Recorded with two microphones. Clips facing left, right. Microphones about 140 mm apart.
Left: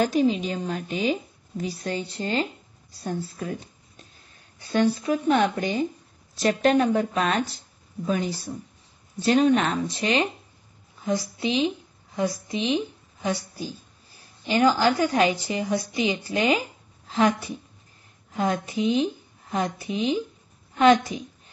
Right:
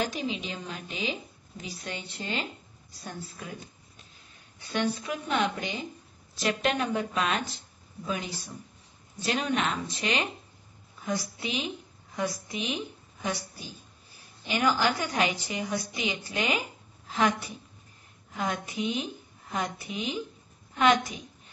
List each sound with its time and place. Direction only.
0.0 s a woman's voice: 40° left (ahead or behind)
4.6 s a woman's voice: 35° left (ahead or behind)
9.2 s a woman's voice: 35° left (ahead or behind)
14.5 s a woman's voice: 30° left (ahead or behind)